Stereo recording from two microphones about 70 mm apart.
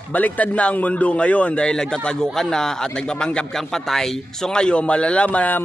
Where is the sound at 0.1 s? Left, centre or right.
Left.